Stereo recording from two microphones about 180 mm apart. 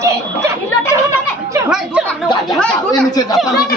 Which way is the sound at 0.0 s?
15° right (ahead or behind).